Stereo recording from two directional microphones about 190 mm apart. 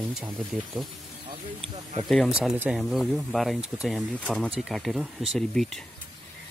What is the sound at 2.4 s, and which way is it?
Speech, 5° right (ahead or behind).